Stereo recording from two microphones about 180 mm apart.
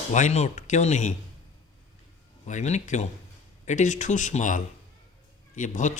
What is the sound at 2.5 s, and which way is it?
Speech, 40° left (ahead or behind).